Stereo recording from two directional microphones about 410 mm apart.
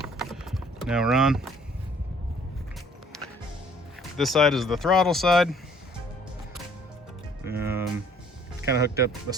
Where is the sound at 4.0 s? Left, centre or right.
Centre.